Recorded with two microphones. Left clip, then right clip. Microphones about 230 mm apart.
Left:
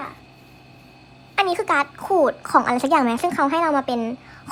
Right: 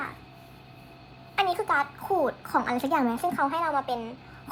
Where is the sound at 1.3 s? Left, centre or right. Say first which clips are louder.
Left 5 dB; left.